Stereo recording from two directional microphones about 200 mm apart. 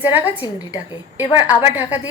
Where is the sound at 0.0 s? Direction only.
10° right (ahead or behind).